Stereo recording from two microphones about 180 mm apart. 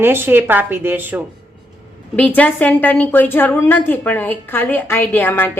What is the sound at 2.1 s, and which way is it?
A woman's voice, 10° left (ahead or behind).